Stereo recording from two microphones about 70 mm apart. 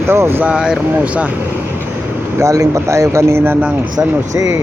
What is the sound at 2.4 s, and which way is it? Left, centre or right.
A man's voice, right.